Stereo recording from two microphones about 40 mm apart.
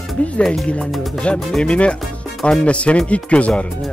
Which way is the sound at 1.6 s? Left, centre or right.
Left.